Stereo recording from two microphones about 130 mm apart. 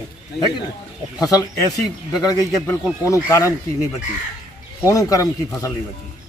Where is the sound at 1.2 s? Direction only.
30° left (ahead or behind).